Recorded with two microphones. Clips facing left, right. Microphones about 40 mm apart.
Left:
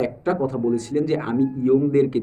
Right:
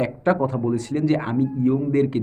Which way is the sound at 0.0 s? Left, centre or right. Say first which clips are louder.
Right 1 dB; centre.